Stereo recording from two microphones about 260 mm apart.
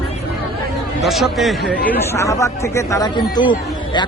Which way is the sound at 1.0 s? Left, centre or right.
Centre.